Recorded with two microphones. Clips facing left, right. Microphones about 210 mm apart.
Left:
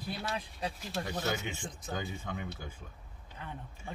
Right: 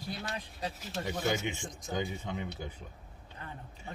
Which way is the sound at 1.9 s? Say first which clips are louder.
Right 3 dB; 20° right (ahead or behind).